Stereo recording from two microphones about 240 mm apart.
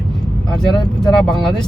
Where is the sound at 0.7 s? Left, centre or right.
Centre.